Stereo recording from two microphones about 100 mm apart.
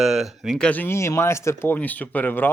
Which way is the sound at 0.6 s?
15° left (ahead or behind).